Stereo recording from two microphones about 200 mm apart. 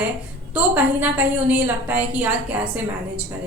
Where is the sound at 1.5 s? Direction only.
5° right (ahead or behind).